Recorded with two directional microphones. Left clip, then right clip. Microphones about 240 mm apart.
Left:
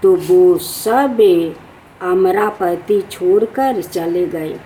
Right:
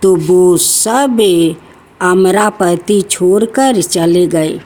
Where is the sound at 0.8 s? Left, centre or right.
Right.